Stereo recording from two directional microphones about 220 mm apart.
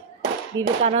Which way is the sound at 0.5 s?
20° right (ahead or behind).